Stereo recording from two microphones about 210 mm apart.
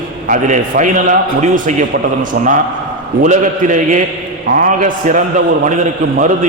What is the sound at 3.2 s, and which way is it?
A man's voice, 40° right (ahead or behind).